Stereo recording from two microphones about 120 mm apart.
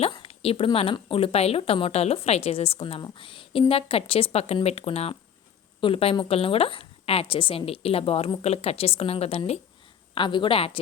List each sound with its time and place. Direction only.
0.0 s a woman's voice: 50° left (ahead or behind)
10.2 s a woman's voice: 40° left (ahead or behind)